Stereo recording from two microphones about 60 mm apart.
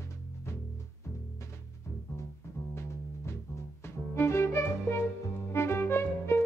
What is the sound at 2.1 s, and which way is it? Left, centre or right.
Music, left.